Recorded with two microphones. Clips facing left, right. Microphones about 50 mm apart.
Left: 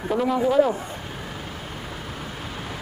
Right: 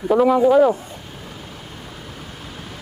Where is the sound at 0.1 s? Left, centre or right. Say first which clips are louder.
Right 8 dB; right.